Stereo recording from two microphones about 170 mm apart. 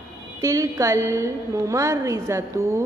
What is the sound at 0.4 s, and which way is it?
A woman's voice, 20° right (ahead or behind).